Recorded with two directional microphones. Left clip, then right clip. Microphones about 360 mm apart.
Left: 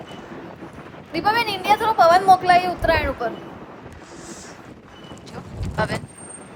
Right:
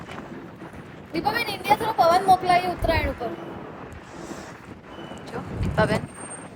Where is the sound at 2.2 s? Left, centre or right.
Centre.